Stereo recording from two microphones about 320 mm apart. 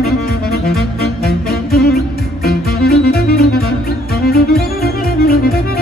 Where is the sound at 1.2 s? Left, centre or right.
Left.